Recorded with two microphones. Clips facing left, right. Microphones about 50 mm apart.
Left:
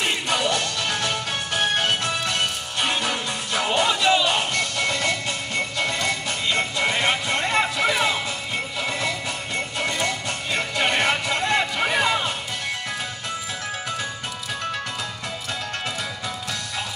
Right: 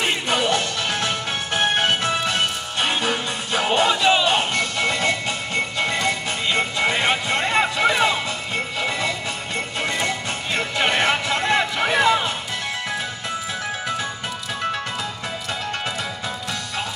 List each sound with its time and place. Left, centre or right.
0.0 s music: right
7.8 s music: centre
9.8 s music: right
11.7 s a sound: centre